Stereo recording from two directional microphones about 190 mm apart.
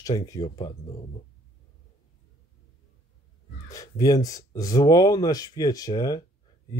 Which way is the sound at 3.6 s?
20° left (ahead or behind).